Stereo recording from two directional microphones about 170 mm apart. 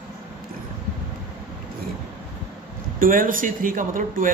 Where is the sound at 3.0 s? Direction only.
55° right (ahead or behind).